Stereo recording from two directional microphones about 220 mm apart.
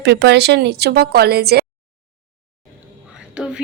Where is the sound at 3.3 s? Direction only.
5° right (ahead or behind).